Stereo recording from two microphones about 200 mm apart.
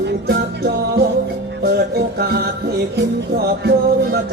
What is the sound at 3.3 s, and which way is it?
Music, 55° right (ahead or behind).